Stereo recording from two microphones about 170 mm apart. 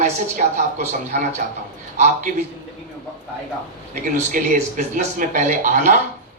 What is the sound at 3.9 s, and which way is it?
Speech, 50° right (ahead or behind).